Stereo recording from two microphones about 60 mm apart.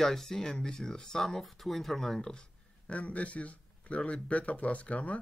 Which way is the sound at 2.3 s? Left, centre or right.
Centre.